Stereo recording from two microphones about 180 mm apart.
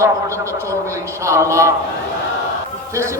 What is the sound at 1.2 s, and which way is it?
Speech, 15° right (ahead or behind).